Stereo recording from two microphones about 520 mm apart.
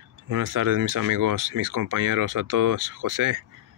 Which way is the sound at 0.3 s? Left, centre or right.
Right.